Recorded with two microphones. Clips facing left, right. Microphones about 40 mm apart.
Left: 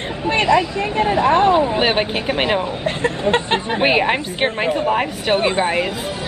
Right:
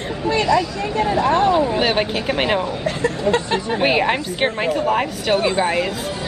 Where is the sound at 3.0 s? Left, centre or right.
Left.